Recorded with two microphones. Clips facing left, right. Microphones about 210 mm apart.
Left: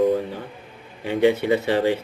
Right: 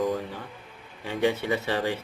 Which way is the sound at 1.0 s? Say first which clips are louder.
Left 7 dB; 20° left (ahead or behind).